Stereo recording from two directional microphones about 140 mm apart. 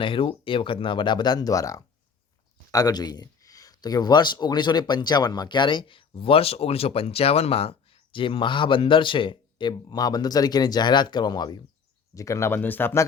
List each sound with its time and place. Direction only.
0.0 s speech: 40° left (ahead or behind); by 13.1 s 15° left (ahead or behind)